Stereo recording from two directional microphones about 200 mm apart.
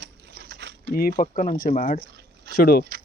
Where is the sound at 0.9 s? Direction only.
50° left (ahead or behind).